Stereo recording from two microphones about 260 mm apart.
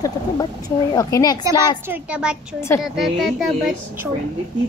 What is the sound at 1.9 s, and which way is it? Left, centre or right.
Speech, centre.